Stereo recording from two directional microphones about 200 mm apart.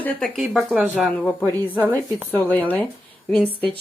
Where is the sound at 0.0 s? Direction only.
Centre (ahead or behind).